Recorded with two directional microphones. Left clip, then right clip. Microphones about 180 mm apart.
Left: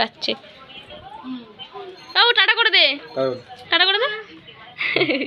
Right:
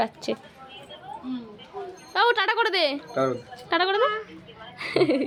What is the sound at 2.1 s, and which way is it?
A woman's voice, 25° right (ahead or behind).